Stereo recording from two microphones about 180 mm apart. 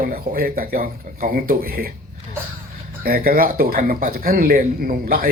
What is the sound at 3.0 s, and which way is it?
Speech, 55° right (ahead or behind).